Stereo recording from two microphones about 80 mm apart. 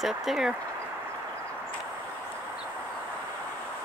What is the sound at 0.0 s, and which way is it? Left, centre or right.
Speech, centre.